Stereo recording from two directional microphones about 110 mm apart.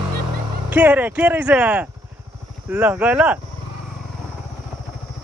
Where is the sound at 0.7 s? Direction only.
15° right (ahead or behind).